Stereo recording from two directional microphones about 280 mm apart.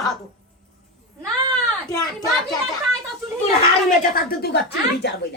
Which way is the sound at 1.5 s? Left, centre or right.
Centre.